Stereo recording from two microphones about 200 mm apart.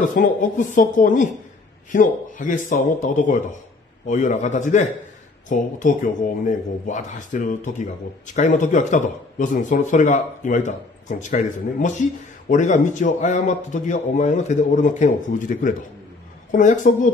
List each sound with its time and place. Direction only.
0.0 s speech: 40° left (ahead or behind)